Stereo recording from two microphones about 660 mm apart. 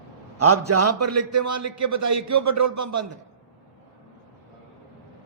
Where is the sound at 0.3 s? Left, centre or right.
Right.